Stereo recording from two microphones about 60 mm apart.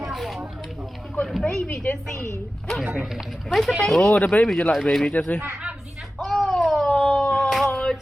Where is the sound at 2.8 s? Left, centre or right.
Centre.